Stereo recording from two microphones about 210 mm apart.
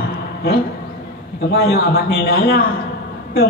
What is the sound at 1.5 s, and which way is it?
A man's voice, 50° left (ahead or behind).